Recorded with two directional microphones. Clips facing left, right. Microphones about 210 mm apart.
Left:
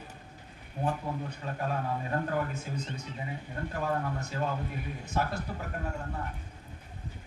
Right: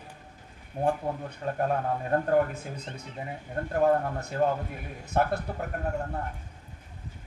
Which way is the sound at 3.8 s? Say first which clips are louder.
Right 9 dB; 55° right (ahead or behind).